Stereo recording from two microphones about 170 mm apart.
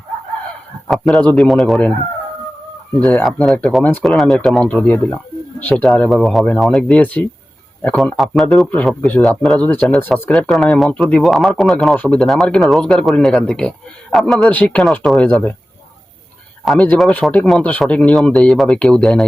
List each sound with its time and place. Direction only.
0.9 s a man's voice: centre (ahead or behind)
3.0 s a man's voice: 5° left (ahead or behind)
16.6 s a man's voice: 5° left (ahead or behind)